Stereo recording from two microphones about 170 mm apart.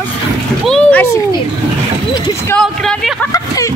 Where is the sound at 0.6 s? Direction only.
5° left (ahead or behind).